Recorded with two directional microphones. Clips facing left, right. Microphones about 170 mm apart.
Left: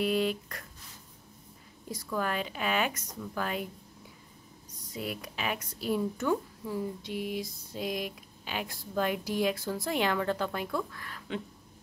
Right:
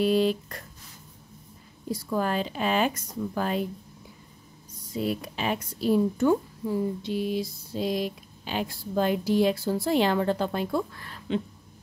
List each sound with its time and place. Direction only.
0.0 s speech: 35° right (ahead or behind)
1.9 s speech: 30° right (ahead or behind)
4.9 s speech: 30° right (ahead or behind)